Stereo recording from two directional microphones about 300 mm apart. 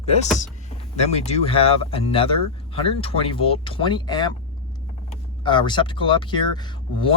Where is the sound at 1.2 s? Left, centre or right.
Left.